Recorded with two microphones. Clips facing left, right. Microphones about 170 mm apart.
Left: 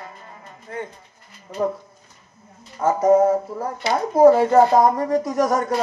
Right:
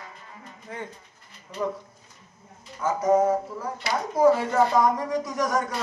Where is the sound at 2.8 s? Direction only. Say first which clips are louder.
Left 6 dB; 50° left (ahead or behind).